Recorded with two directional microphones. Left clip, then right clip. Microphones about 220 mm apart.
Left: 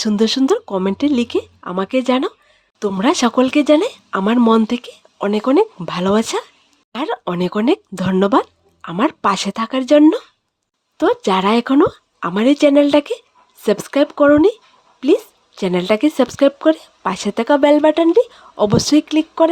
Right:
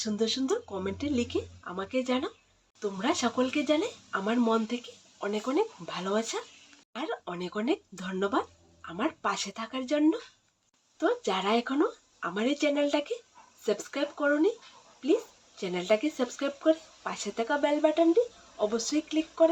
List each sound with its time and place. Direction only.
0.0 s speech: 55° left (ahead or behind)